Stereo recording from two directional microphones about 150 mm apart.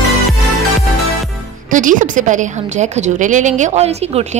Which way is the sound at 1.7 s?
60° right (ahead or behind).